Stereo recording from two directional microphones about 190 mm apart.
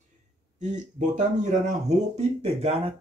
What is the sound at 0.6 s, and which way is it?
Speech, 40° right (ahead or behind).